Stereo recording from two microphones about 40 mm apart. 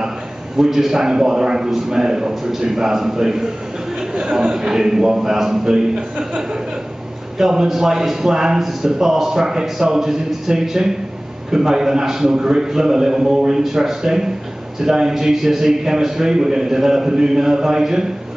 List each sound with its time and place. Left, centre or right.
0.6 s a man's voice: centre